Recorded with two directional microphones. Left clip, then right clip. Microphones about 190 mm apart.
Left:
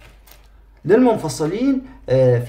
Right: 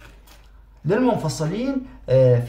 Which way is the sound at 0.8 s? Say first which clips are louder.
Left 6 dB; 35° left (ahead or behind).